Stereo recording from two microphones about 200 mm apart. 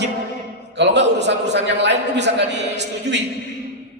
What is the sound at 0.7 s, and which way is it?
A man's voice, 60° right (ahead or behind).